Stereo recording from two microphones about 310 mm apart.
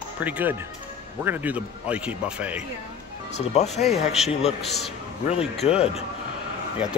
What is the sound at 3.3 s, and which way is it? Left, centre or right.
Speech, left.